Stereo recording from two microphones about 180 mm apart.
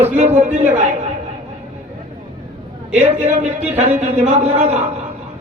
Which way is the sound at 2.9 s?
40° right (ahead or behind).